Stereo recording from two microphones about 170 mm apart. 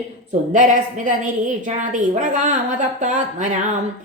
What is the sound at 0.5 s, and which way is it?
A woman's voice, 50° right (ahead or behind).